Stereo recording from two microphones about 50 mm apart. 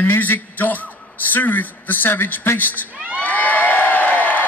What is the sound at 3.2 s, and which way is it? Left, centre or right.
Crowd, left.